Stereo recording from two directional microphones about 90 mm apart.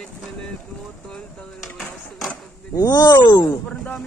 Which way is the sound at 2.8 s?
50° left (ahead or behind).